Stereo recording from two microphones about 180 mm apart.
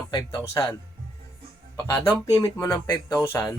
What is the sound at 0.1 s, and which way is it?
Speech, 20° left (ahead or behind).